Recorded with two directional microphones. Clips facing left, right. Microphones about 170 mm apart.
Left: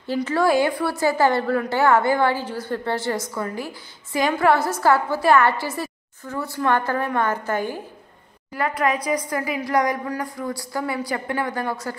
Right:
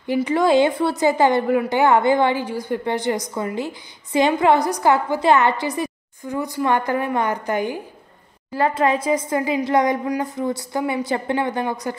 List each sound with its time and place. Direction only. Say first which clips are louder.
0.0 s a woman's voice: right 2 dB; 15° right (ahead or behind)
8.5 s a woman's voice: right 4 dB; 30° right (ahead or behind)